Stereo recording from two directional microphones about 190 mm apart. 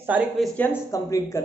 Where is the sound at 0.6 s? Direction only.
15° left (ahead or behind).